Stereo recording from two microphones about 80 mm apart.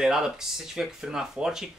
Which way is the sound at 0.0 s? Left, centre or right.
Centre.